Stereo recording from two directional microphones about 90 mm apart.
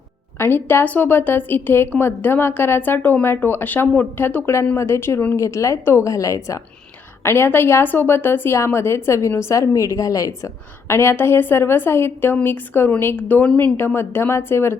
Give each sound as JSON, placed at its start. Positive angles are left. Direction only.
{"t": 0.3, "sound": "a woman's voice", "side_deg": 25}
{"t": 13.7, "sound": "a woman's voice", "side_deg": 25}